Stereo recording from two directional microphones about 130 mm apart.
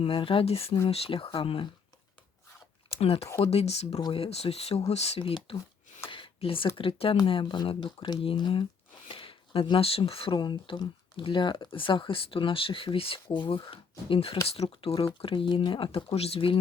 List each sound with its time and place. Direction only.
0.0 s speech: 45° left (ahead or behind)
3.0 s speech: 50° left (ahead or behind)
6.1 s a sound: 40° left (ahead or behind)
6.7 s speech: 45° left (ahead or behind)